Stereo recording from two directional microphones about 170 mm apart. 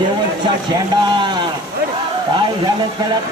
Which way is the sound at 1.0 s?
25° right (ahead or behind).